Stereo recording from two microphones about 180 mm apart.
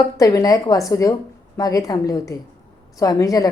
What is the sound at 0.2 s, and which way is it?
A woman's voice, 20° left (ahead or behind).